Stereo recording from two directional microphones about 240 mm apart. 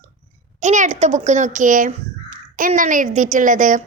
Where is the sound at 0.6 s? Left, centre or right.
Right.